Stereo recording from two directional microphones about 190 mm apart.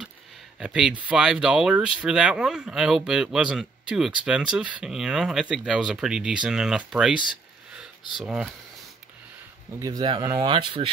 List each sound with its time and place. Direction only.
0.6 s speech: 5° right (ahead or behind)
8.2 s speech: 5° right (ahead or behind)
9.8 s speech: 20° right (ahead or behind)